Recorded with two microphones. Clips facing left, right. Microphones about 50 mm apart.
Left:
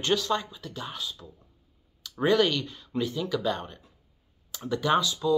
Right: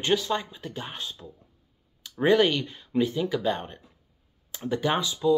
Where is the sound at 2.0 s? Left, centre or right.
Right.